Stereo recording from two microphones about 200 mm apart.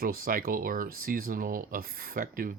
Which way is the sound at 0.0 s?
45° right (ahead or behind).